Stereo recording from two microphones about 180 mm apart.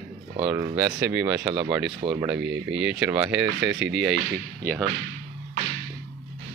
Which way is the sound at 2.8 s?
5° right (ahead or behind).